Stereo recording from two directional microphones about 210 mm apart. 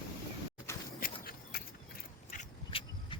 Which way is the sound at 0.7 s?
15° left (ahead or behind).